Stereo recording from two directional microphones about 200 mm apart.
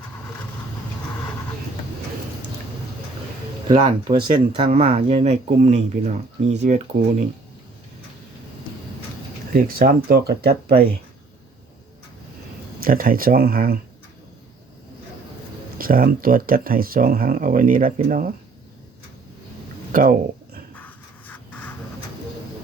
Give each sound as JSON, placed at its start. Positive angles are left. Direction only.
{"t": 3.7, "sound": "speech", "side_deg": -25}
{"t": 9.5, "sound": "speech", "side_deg": -45}
{"t": 12.8, "sound": "speech", "side_deg": -45}
{"t": 15.8, "sound": "speech", "side_deg": -45}
{"t": 19.9, "sound": "speech", "side_deg": -45}
{"t": 20.7, "sound": "a sound", "side_deg": 10}